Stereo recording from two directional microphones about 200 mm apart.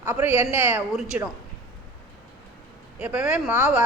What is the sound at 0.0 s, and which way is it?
A woman's voice, 10° right (ahead or behind).